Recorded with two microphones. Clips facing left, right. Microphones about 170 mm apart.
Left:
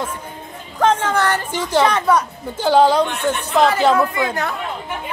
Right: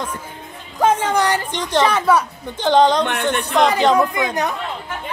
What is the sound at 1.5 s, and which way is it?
Speech, 5° left (ahead or behind).